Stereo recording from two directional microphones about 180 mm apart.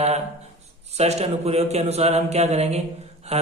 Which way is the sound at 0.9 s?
35° right (ahead or behind).